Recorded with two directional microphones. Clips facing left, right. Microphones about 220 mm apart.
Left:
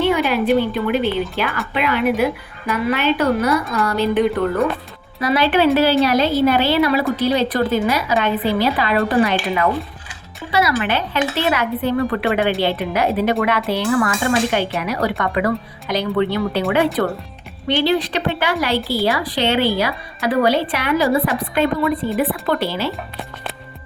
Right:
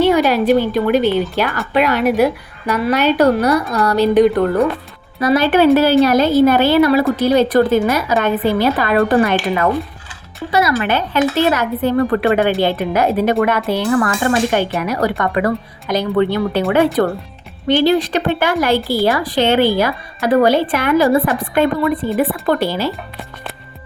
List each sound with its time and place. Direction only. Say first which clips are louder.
0.0 s a woman's voice: right 4 dB; 40° right (ahead or behind)